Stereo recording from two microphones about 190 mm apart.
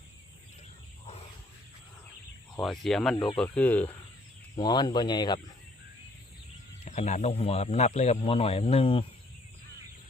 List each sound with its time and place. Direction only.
2.6 s speech: centre (ahead or behind)
4.5 s speech: 20° left (ahead or behind)
6.8 s speech: 35° left (ahead or behind)